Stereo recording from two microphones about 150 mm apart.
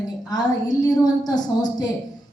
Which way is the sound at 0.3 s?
25° left (ahead or behind).